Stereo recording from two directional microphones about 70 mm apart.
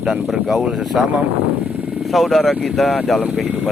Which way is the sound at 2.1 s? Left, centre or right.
Centre.